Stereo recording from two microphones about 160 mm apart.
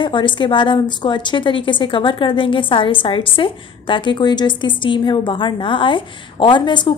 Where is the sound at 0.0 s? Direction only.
30° left (ahead or behind).